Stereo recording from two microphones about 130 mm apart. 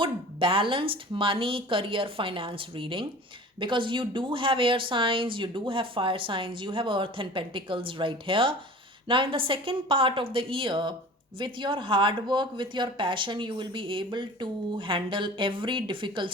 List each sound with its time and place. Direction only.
0.0 s speech: 40° right (ahead or behind)